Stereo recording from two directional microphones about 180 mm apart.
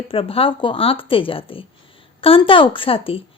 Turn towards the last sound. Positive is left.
turn(degrees=30)  # may be behind; listen again after turning